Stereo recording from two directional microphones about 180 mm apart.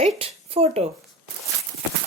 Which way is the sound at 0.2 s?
35° right (ahead or behind).